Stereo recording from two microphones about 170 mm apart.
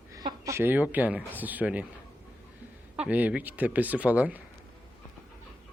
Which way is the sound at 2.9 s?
10° right (ahead or behind).